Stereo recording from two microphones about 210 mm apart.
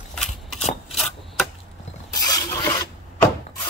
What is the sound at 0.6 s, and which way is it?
Rub, 30° left (ahead or behind).